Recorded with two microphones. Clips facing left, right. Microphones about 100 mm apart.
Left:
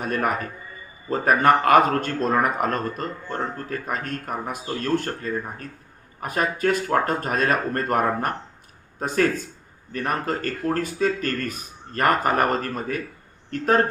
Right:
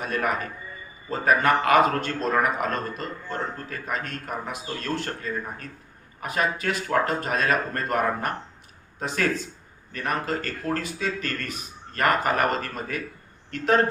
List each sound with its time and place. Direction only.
0.0 s a man's voice: 45° left (ahead or behind)